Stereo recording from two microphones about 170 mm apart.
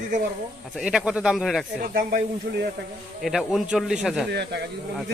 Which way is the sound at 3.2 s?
Centre (ahead or behind).